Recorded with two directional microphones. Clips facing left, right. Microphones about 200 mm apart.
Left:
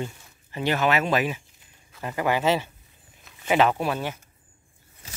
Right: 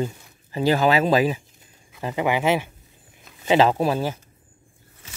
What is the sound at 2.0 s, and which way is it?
Speech, 20° right (ahead or behind).